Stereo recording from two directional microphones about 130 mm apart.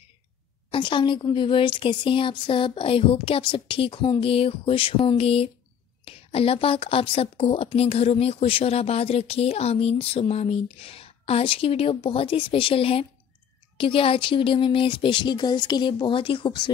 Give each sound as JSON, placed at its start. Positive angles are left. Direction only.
{"t": 0.7, "sound": "a woman's voice", "side_deg": 40}